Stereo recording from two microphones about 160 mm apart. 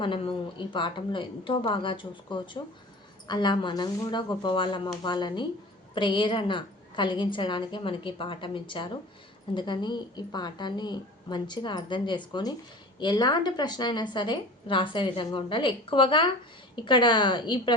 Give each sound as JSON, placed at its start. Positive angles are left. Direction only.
{"t": 0.0, "sound": "a woman's voice", "side_deg": 30}